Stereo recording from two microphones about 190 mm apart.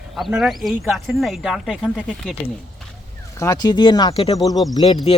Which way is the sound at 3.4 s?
20° left (ahead or behind).